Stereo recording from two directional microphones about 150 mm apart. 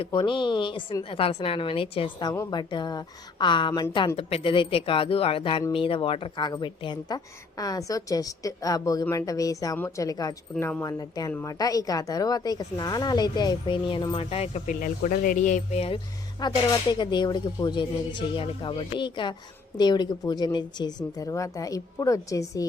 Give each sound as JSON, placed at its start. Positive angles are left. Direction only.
{"t": 0.0, "sound": "a woman's voice", "side_deg": 30}
{"t": 3.7, "sound": "a woman's voice", "side_deg": 20}
{"t": 4.2, "sound": "a woman's voice", "side_deg": 40}
{"t": 14.7, "sound": "speech", "side_deg": 60}
{"t": 16.4, "sound": "speech", "side_deg": 30}